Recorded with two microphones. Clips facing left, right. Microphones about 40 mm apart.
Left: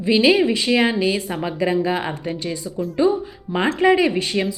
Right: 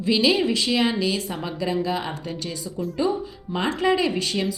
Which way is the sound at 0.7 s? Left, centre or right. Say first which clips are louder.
Left 4 dB; left.